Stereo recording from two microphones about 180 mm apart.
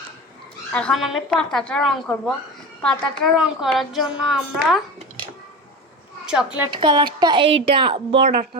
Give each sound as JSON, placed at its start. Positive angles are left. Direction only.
{"t": 0.7, "sound": "a woman's voice", "side_deg": 5}
{"t": 6.2, "sound": "a woman's voice", "side_deg": -5}
{"t": 6.7, "sound": "speech", "side_deg": -25}